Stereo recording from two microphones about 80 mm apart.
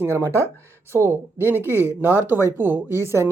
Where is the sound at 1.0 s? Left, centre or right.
Left.